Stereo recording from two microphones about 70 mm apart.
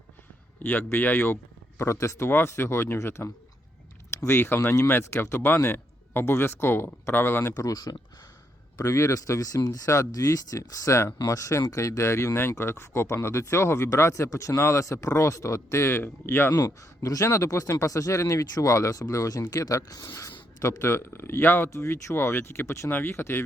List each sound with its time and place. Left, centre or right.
0.6 s a man's voice: left
1.8 s speech: left
7.5 s speech: left
8.8 s speech: left
9.6 s speech: left
9.8 s speech: left
16.6 s speech: left